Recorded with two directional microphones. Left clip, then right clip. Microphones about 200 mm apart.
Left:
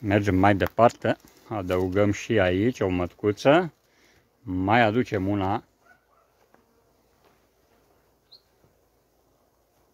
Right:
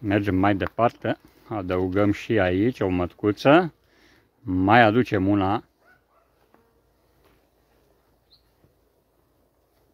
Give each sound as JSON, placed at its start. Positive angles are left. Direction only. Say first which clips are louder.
{"t": 0.0, "sound": "speech", "louder": "left 1 dB", "side_deg": 5}
{"t": 1.4, "sound": "speech", "louder": "right 2 dB", "side_deg": -5}